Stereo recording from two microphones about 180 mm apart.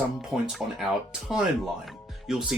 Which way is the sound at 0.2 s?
Centre (ahead or behind).